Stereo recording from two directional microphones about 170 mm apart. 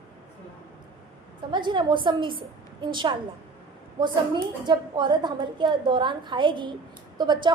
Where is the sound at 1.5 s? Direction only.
25° right (ahead or behind).